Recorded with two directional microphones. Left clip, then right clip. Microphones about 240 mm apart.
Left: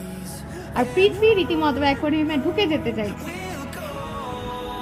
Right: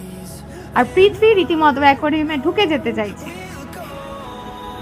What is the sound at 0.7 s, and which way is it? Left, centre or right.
A woman's voice, centre.